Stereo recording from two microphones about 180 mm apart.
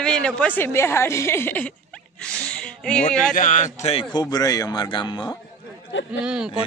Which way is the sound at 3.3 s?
40° left (ahead or behind).